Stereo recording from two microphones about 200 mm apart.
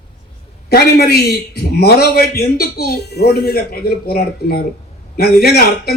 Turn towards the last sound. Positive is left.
turn(degrees=50)  # may be behind; listen again after turning